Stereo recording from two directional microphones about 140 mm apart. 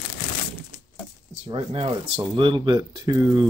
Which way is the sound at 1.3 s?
45° right (ahead or behind).